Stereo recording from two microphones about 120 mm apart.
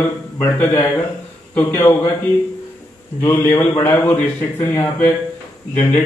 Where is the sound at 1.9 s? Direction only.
35° left (ahead or behind).